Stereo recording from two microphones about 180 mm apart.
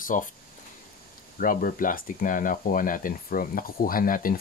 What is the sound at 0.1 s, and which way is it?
Speech, 45° left (ahead or behind).